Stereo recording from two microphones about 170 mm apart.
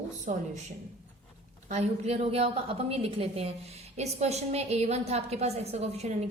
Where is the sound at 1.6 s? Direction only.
40° right (ahead or behind).